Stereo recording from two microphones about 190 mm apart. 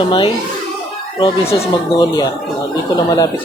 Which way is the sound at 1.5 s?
15° left (ahead or behind).